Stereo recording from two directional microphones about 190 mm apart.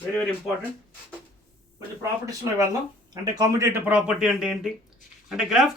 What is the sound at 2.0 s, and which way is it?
Speech, 15° right (ahead or behind).